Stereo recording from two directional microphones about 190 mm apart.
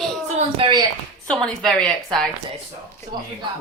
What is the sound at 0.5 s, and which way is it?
Speech, 25° right (ahead or behind).